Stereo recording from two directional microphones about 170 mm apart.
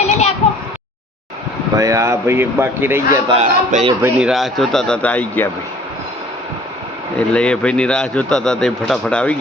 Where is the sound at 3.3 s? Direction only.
35° right (ahead or behind).